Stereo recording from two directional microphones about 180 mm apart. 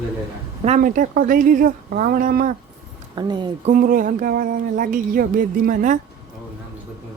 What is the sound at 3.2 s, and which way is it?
Speech, 25° right (ahead or behind).